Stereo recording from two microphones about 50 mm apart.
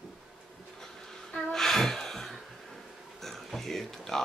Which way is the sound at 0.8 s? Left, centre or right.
Centre.